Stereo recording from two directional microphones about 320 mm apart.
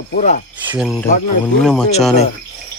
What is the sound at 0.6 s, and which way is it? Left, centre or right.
Speech, centre.